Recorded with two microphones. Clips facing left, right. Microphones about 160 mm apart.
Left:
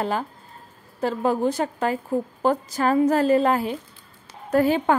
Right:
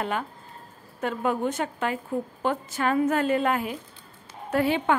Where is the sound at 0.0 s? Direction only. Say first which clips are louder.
Left 3 dB; 35° left (ahead or behind).